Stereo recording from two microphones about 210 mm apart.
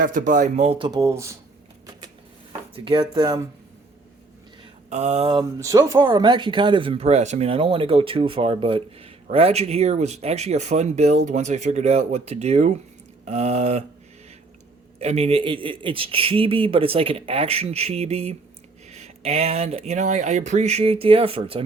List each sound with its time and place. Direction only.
0.0 s speech: 40° right (ahead or behind); by 1.4 s 15° right (ahead or behind)
2.7 s speech: 25° right (ahead or behind)
4.9 s speech: 30° right (ahead or behind)
14.9 s speech: 30° right (ahead or behind)